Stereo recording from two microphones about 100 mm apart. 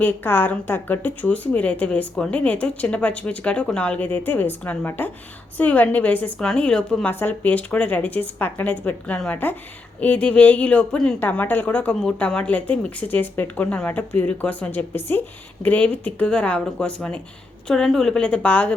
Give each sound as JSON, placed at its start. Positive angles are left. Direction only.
{"t": 0.0, "sound": "a woman's voice", "side_deg": 20}
{"t": 7.1, "sound": "a woman's voice", "side_deg": 20}